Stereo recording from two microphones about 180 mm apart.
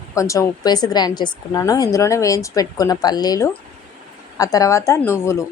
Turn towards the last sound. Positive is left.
turn(degrees=15)  # may be behind; listen again after turning